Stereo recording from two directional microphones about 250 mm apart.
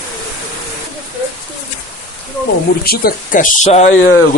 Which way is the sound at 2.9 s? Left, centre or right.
Left.